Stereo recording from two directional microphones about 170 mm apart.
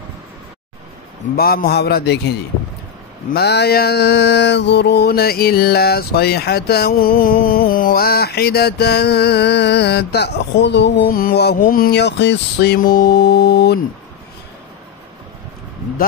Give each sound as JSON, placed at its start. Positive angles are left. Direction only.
{"t": 1.3, "sound": "mantra", "side_deg": 65}